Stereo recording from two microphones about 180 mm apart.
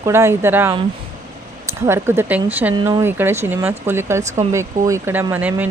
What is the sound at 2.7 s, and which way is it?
A woman's voice, 20° right (ahead or behind).